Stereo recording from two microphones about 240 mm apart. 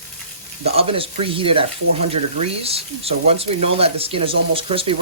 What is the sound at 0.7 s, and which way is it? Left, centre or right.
Speech, right.